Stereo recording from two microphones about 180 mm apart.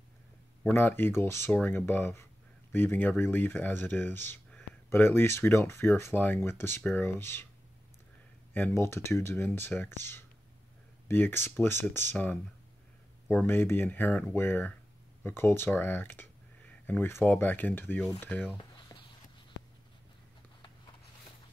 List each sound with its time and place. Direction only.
0.7 s speech: 10° left (ahead or behind)
8.5 s speech: 10° left (ahead or behind)
11.1 s speech: 10° left (ahead or behind)
18.6 s a sound: 25° left (ahead or behind)